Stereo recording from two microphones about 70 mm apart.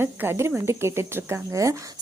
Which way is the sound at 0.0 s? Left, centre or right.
Right.